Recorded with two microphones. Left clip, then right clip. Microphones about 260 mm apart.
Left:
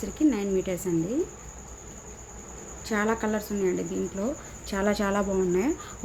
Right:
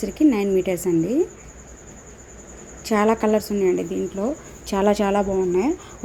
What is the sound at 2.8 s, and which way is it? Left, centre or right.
A woman's voice, centre.